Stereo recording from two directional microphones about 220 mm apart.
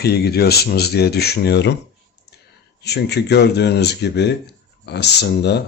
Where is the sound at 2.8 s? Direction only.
50° left (ahead or behind).